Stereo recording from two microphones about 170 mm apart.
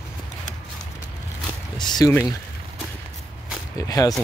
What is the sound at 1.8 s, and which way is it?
Speech, 25° left (ahead or behind).